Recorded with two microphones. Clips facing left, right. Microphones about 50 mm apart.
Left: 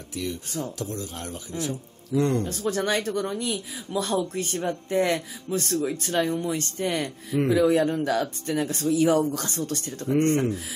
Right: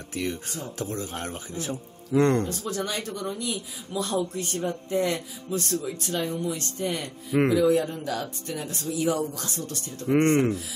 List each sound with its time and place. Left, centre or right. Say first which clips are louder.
0.1 s speech: right 1 dB; right
0.7 s a man's voice: right 1 dB; right
2.6 s speech: left 5 dB; left
10.0 s speech: right 1 dB; right